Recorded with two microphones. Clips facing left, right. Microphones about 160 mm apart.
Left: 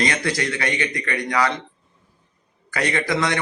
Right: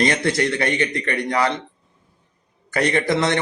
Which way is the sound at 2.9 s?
25° right (ahead or behind).